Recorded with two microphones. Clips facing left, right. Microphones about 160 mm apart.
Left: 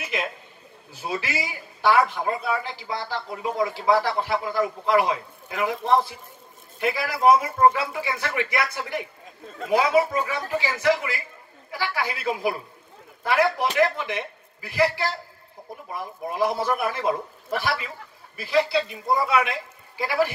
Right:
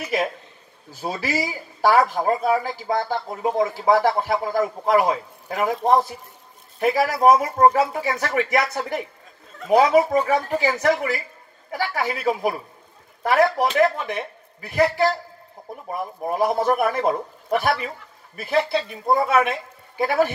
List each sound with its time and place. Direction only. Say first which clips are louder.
1.0 s a man's voice: right 4 dB; 40° right (ahead or behind)
14.7 s a man's voice: right 4 dB; 50° right (ahead or behind)